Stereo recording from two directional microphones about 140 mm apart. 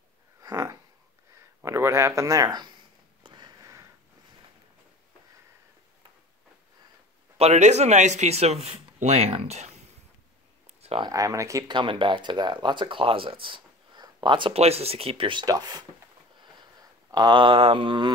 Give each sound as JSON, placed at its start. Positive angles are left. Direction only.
{"t": 0.4, "sound": "a sound", "side_deg": -25}
{"t": 1.6, "sound": "speech", "side_deg": -20}
{"t": 3.3, "sound": "sniff", "side_deg": -30}
{"t": 7.3, "sound": "speech", "side_deg": -55}
{"t": 10.8, "sound": "a sound", "side_deg": -45}
{"t": 11.1, "sound": "speech", "side_deg": -25}
{"t": 17.1, "sound": "speech", "side_deg": -30}